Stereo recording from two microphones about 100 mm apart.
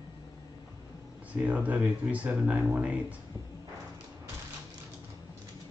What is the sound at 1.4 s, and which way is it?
Speech, 15° right (ahead or behind).